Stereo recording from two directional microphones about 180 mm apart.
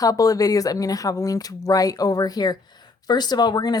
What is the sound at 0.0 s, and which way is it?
Speech, 20° left (ahead or behind).